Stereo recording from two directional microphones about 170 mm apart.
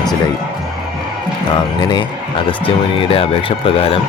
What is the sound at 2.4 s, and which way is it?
Speech, 30° left (ahead or behind).